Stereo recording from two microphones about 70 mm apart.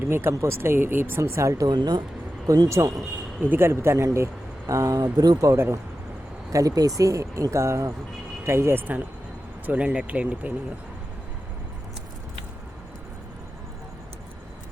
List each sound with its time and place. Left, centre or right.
0.1 s speech: right
1.2 s speech: right
1.6 s speech: right
2.6 s speech: right
3.4 s speech: right
9.6 s speech: centre